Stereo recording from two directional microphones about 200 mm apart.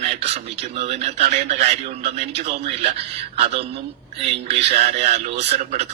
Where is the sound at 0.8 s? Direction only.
35° right (ahead or behind).